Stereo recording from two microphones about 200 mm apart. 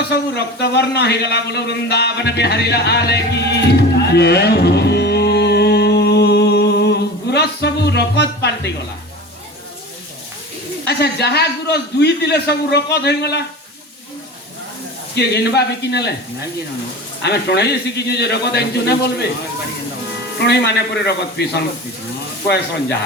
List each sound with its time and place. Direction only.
0.0 s a man's voice: 55° left (ahead or behind)
10.8 s a man's voice: 55° left (ahead or behind)
15.1 s a man's voice: 55° left (ahead or behind)
17.2 s a man's voice: 55° left (ahead or behind)
20.4 s a man's voice: 55° left (ahead or behind)